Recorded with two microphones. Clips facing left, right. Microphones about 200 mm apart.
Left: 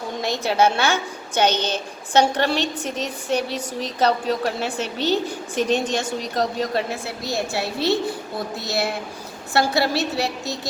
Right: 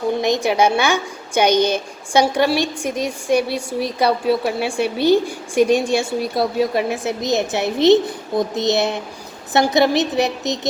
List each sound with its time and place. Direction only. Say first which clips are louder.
0.2 s a woman's voice: even; 15° right (ahead or behind)